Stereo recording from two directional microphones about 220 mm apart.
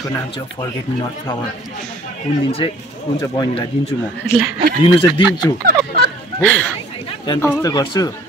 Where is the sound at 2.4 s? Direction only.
25° left (ahead or behind).